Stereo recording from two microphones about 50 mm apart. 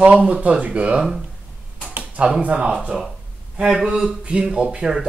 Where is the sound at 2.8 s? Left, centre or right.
Centre.